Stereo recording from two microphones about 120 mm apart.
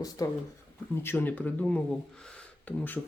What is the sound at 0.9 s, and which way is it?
Speech, 20° left (ahead or behind).